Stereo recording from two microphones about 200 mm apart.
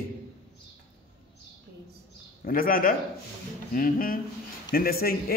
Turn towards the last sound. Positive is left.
turn(degrees=50)  # may be behind; listen again after turning